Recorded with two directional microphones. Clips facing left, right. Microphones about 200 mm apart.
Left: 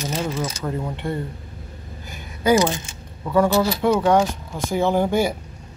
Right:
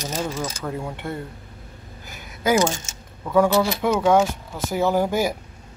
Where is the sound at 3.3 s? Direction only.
10° right (ahead or behind).